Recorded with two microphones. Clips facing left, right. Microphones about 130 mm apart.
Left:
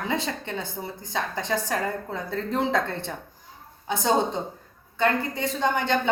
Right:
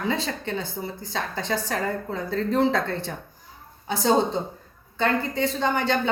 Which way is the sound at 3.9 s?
20° left (ahead or behind).